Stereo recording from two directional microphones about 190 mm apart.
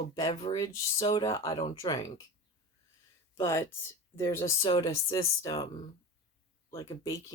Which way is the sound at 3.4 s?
15° left (ahead or behind).